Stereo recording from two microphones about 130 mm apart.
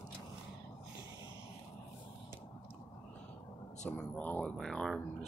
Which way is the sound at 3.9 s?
15° left (ahead or behind).